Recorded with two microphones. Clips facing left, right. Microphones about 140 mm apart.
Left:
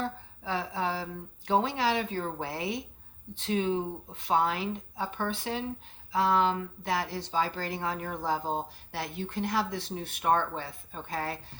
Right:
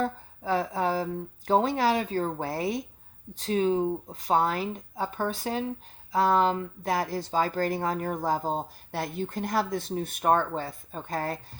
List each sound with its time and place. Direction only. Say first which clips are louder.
0.0 s speech: right 5 dB; 45° right (ahead or behind)